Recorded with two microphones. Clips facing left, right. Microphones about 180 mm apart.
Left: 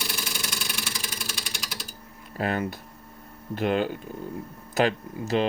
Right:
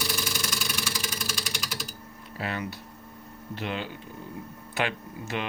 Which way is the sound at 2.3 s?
45° left (ahead or behind).